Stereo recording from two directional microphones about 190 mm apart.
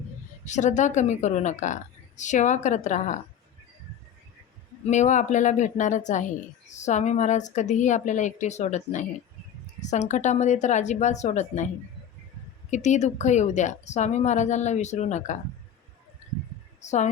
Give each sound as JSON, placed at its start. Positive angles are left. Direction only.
{"t": 0.4, "sound": "a woman's voice", "side_deg": 40}
{"t": 4.9, "sound": "a woman's voice", "side_deg": 40}
{"t": 12.7, "sound": "a woman's voice", "side_deg": 40}
{"t": 16.8, "sound": "speech", "side_deg": 40}